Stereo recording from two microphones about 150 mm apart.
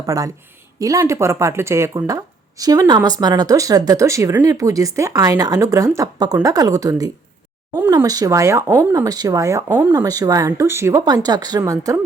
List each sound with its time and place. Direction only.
0.0 s speech: 25° right (ahead or behind)